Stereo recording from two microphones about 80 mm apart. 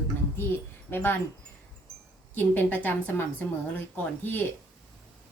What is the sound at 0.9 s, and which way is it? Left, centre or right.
Speech, left.